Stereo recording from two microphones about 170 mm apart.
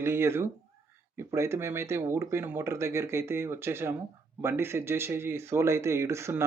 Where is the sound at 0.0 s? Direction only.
15° right (ahead or behind).